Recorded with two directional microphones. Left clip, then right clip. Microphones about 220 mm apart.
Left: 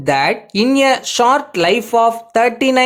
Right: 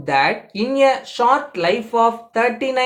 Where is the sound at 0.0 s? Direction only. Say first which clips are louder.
Left 2 dB; 50° left (ahead or behind).